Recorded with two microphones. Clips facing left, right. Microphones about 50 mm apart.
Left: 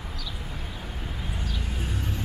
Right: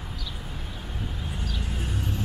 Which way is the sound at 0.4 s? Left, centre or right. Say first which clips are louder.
Left 1 dB; centre.